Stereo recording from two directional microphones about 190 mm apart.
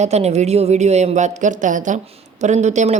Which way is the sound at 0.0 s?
35° right (ahead or behind).